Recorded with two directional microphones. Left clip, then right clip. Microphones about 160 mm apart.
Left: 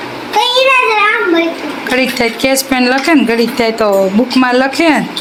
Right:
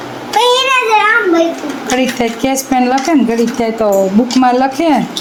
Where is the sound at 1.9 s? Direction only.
10° right (ahead or behind).